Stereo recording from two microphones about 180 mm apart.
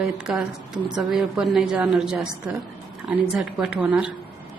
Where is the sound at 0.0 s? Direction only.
Centre (ahead or behind).